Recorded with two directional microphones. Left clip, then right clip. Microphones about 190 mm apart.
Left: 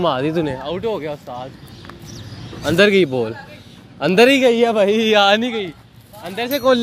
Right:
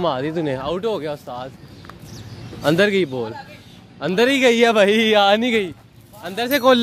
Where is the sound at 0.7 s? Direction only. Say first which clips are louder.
Even; 15° right (ahead or behind).